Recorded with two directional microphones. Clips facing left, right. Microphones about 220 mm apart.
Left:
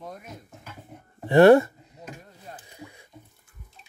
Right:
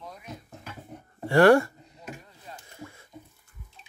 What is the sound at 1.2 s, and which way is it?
Speech, 20° left (ahead or behind).